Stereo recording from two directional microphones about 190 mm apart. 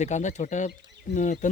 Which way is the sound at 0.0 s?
40° left (ahead or behind).